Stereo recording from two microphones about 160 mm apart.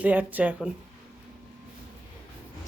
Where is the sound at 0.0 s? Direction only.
10° right (ahead or behind).